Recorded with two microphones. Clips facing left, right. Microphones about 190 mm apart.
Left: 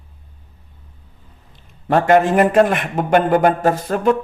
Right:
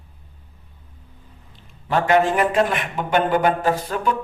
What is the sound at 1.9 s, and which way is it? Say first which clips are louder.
A man's voice: left 4 dB; 50° left (ahead or behind).